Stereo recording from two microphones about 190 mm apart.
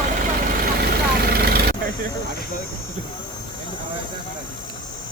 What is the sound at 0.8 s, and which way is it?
Vehicle, 55° right (ahead or behind).